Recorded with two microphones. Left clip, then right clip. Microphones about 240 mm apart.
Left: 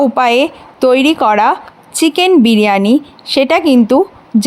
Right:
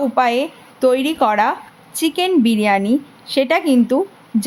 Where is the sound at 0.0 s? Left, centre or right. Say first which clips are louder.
Left 6 dB; left.